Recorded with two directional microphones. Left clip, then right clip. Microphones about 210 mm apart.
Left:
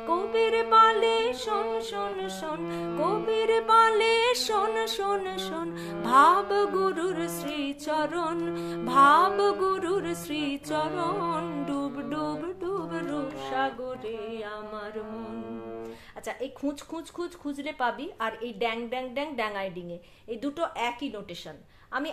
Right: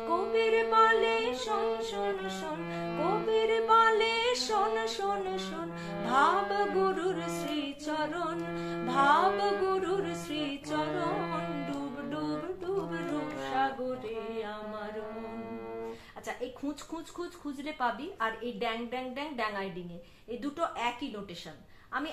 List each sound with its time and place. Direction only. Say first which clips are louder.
0.3 s music: left 5 dB; 55° left (ahead or behind)
16.3 s a woman's voice: left 4 dB; 55° left (ahead or behind)